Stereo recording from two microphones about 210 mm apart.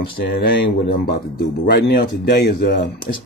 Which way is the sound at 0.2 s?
45° left (ahead or behind).